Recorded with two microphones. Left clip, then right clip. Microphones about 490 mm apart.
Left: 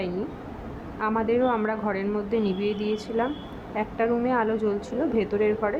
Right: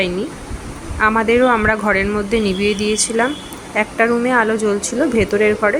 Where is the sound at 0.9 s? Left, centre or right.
Left.